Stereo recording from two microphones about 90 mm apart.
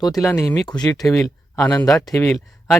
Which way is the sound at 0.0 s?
45° left (ahead or behind).